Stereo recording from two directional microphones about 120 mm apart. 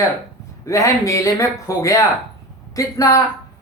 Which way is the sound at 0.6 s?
25° left (ahead or behind).